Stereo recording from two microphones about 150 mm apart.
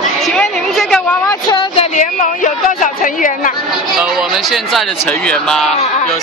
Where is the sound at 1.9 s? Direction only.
60° left (ahead or behind).